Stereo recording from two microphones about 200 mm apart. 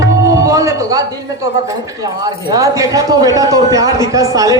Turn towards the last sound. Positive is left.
turn(degrees=-15)  # may be behind; listen again after turning